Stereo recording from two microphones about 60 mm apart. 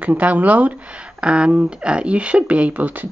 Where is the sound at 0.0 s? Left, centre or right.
Right.